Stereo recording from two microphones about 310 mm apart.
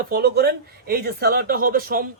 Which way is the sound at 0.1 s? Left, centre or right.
Right.